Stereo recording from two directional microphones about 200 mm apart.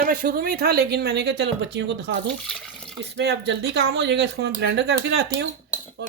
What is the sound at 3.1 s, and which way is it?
Cutlery, 60° right (ahead or behind).